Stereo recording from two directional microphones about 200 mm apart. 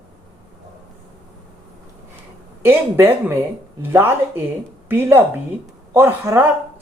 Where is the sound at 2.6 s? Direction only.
10° right (ahead or behind).